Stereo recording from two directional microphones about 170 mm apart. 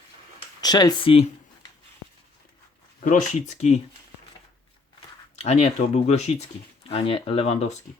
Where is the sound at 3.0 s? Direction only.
50° left (ahead or behind).